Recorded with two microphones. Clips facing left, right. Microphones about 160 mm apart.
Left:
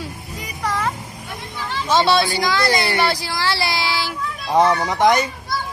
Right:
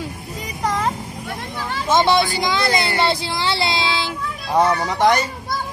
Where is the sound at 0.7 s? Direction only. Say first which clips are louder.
Right 2 dB; 30° right (ahead or behind).